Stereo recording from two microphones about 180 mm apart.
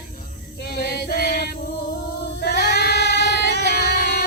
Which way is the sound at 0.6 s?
60° left (ahead or behind).